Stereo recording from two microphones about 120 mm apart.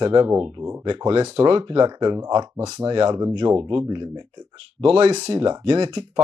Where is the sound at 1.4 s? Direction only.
45° right (ahead or behind); by 2.8 s 25° right (ahead or behind).